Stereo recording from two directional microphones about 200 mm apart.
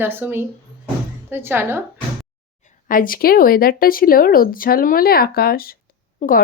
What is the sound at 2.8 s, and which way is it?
Speech, 45° left (ahead or behind).